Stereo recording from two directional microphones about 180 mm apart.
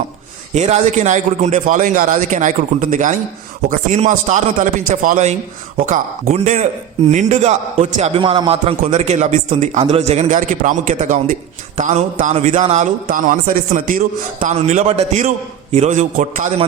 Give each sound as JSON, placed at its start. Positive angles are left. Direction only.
{"t": 0.5, "sound": "a man's voice", "side_deg": -40}